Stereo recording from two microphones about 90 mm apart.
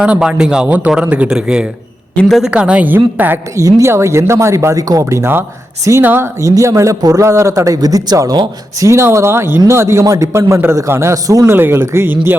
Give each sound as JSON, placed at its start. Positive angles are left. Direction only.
{"t": 0.0, "sound": "speech", "side_deg": -10}
{"t": 3.5, "sound": "speech", "side_deg": -35}
{"t": 6.4, "sound": "speech", "side_deg": -35}
{"t": 8.9, "sound": "speech", "side_deg": -30}
{"t": 11.5, "sound": "speech", "side_deg": -25}